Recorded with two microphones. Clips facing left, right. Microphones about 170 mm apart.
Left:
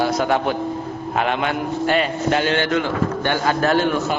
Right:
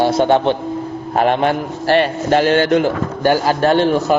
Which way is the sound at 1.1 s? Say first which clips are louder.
Right 6 dB; 40° right (ahead or behind).